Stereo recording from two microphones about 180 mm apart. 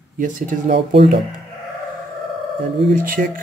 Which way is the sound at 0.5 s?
45° right (ahead or behind).